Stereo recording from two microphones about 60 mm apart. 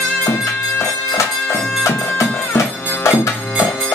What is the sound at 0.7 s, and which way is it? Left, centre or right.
Music, left.